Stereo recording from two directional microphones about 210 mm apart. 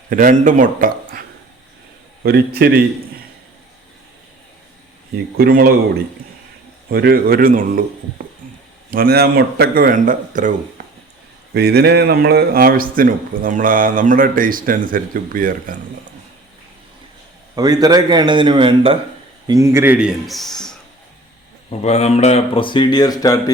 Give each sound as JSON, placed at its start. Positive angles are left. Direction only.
{"t": 0.1, "sound": "a man's voice", "side_deg": -40}
{"t": 2.2, "sound": "a man's voice", "side_deg": -50}
{"t": 5.1, "sound": "a man's voice", "side_deg": -45}
{"t": 6.9, "sound": "a man's voice", "side_deg": -45}
{"t": 8.9, "sound": "a man's voice", "side_deg": -45}
{"t": 10.8, "sound": "a sound", "side_deg": -35}
{"t": 11.5, "sound": "a man's voice", "side_deg": -50}
{"t": 17.5, "sound": "a man's voice", "side_deg": -15}
{"t": 19.5, "sound": "a man's voice", "side_deg": -15}
{"t": 21.7, "sound": "speech", "side_deg": 30}